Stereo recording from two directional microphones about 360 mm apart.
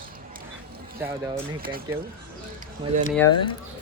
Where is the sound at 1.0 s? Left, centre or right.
Centre.